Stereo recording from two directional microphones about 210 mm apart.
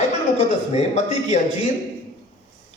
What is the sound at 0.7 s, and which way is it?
Speech, 30° left (ahead or behind).